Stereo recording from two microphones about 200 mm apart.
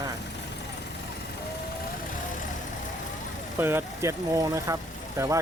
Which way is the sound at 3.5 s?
10° right (ahead or behind).